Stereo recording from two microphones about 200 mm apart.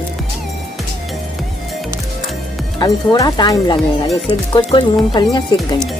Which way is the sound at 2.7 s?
20° left (ahead or behind).